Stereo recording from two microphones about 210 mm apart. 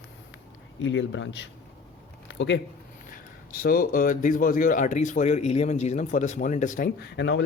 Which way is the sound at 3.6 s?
40° left (ahead or behind).